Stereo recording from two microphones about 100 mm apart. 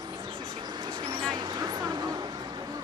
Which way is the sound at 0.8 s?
45° right (ahead or behind).